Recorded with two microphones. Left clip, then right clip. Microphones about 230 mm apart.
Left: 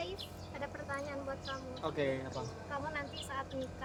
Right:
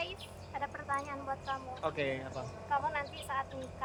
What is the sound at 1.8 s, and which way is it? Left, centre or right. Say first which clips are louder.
Speech: left 1 dB; left.